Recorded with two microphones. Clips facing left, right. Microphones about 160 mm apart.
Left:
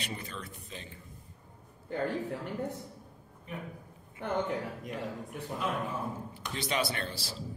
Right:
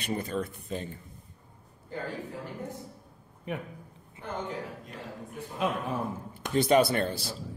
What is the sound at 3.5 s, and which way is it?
Speech, 70° right (ahead or behind).